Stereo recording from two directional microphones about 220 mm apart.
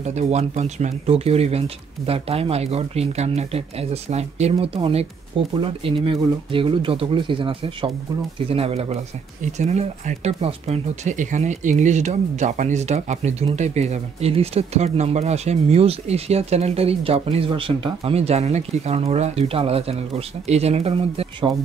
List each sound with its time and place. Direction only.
0.0 s speech: 30° right (ahead or behind)